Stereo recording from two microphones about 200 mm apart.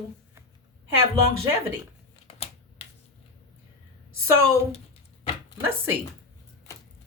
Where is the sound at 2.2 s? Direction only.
30° left (ahead or behind).